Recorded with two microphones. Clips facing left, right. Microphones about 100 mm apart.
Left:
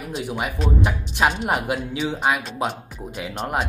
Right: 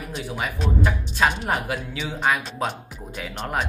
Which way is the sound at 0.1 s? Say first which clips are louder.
Left 3 dB; 20° left (ahead or behind).